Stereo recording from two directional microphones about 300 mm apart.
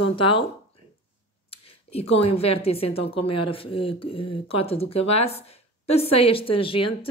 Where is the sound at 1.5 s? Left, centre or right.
Centre.